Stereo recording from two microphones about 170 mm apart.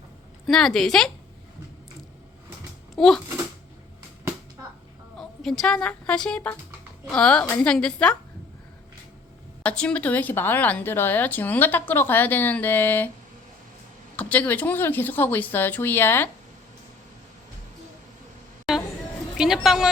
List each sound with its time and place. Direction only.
0.4 s a woman's voice: 5° left (ahead or behind)
2.9 s a sound: centre (ahead or behind)
5.1 s a woman's voice: centre (ahead or behind)
9.6 s a woman's voice: 5° left (ahead or behind)
14.2 s a woman's voice: 10° left (ahead or behind)
18.7 s a sound: centre (ahead or behind)
19.4 s a woman's voice: 5° right (ahead or behind)